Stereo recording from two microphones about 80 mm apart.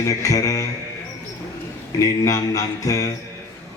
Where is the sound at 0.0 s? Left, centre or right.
Left.